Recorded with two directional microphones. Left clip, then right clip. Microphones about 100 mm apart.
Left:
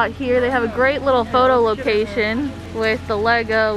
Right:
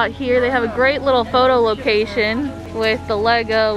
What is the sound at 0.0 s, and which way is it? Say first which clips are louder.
Speech: right 1 dB; 20° right (ahead or behind).